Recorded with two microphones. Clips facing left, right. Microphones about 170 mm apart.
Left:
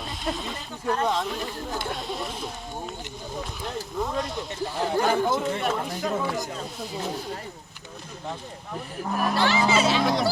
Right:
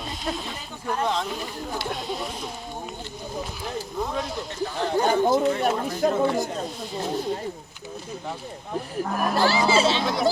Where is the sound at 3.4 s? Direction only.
Centre (ahead or behind).